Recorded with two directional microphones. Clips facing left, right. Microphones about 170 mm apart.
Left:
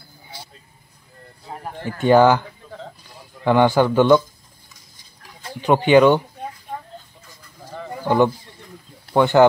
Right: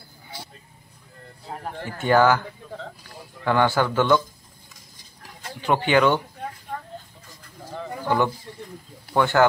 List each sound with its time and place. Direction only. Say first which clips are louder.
1.5 s speech: left 1 dB; 5° left (ahead or behind)
1.9 s a man's voice: left 5 dB; 20° left (ahead or behind)
5.6 s speech: left 6 dB; 20° left (ahead or behind)
7.7 s a sound: left 1 dB; centre (ahead or behind)
9.1 s speech: left 5 dB; 20° left (ahead or behind)